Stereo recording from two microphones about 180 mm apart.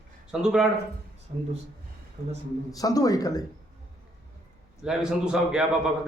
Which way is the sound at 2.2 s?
35° right (ahead or behind).